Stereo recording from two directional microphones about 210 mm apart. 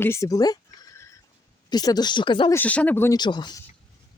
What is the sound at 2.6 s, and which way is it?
Speech, 5° left (ahead or behind).